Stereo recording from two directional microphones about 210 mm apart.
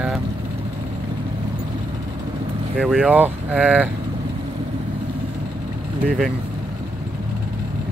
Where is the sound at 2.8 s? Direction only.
5° right (ahead or behind).